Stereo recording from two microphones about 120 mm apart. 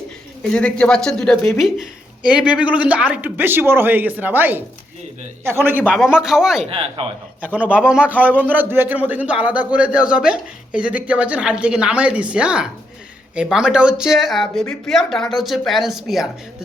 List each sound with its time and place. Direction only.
0.5 s a man's voice: 10° left (ahead or behind); by 5.9 s 15° right (ahead or behind)
5.9 s speech: 5° right (ahead or behind)
6.7 s speech: 50° right (ahead or behind)
7.4 s a man's voice: 10° right (ahead or behind)